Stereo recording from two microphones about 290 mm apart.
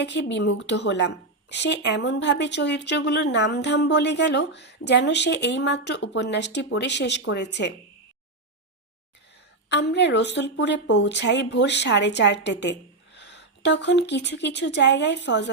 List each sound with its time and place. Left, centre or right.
0.0 s a woman's voice: left
9.6 s a woman's voice: left